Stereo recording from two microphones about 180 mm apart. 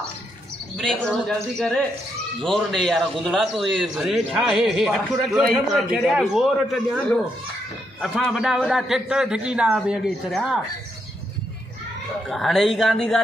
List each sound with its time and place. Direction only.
0.7 s a man's voice: 5° left (ahead or behind)
12.3 s a man's voice: centre (ahead or behind)